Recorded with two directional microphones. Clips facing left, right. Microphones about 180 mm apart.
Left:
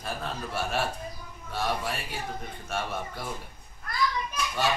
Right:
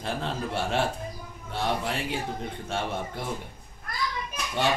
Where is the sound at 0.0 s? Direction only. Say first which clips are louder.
Right 4 dB; 25° right (ahead or behind).